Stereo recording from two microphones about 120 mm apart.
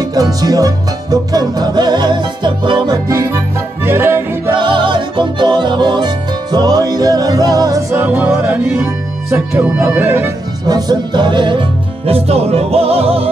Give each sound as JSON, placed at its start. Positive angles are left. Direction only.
{"t": 0.0, "sound": "music", "side_deg": -30}
{"t": 3.1, "sound": "music", "side_deg": -25}
{"t": 4.6, "sound": "music", "side_deg": -40}
{"t": 8.0, "sound": "speech", "side_deg": -15}
{"t": 10.7, "sound": "music", "side_deg": -35}
{"t": 12.1, "sound": "music", "side_deg": -60}